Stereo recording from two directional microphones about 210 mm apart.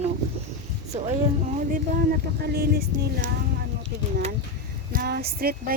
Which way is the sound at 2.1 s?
45° right (ahead or behind).